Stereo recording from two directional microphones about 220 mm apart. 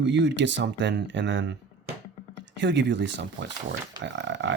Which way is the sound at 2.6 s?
55° right (ahead or behind).